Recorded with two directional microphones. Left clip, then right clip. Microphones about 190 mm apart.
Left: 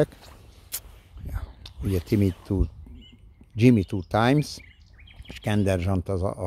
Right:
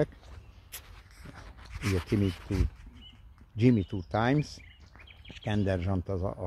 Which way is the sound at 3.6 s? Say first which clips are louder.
Left 6 dB; 30° left (ahead or behind).